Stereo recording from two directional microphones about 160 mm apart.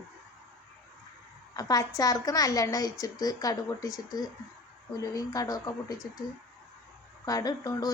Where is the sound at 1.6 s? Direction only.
25° left (ahead or behind).